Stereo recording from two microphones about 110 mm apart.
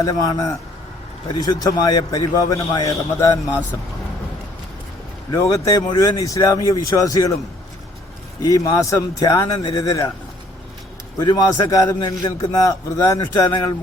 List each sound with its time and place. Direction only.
0.0 s a man's voice: 35° left (ahead or behind)
5.3 s a man's voice: 30° left (ahead or behind)
8.4 s a man's voice: 35° left (ahead or behind)
11.2 s a man's voice: 40° left (ahead or behind)